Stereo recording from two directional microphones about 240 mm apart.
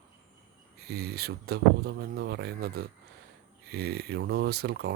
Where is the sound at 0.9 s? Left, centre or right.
Right.